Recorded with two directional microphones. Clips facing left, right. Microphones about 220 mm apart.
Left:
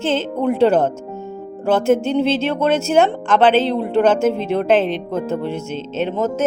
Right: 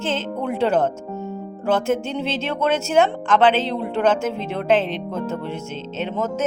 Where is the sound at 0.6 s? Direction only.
35° left (ahead or behind).